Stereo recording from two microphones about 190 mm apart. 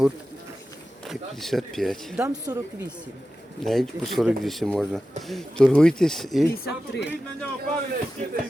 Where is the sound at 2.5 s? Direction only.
15° right (ahead or behind).